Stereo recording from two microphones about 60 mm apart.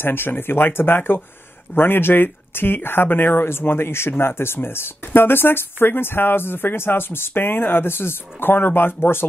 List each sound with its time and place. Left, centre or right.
0.0 s speech: left